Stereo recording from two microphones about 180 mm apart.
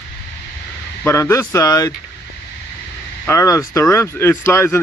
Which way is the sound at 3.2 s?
15° left (ahead or behind).